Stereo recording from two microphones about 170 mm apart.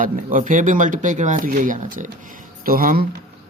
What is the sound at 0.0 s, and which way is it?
Speech, 50° right (ahead or behind).